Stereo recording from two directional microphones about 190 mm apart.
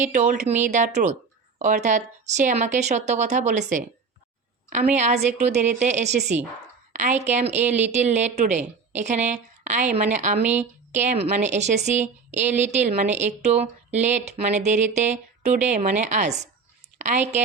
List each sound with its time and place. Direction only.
0.0 s a woman's voice: 40° right (ahead or behind)
4.7 s a woman's voice: 40° right (ahead or behind)
6.1 s speech: 60° right (ahead or behind)
6.9 s a woman's voice: 40° right (ahead or behind)
10.4 s speech: 10° right (ahead or behind)
10.9 s a woman's voice: 40° right (ahead or behind)